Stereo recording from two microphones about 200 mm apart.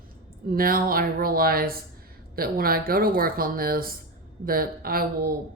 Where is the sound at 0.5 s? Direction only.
45° right (ahead or behind).